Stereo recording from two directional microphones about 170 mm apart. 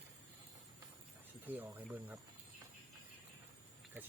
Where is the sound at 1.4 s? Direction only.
10° right (ahead or behind).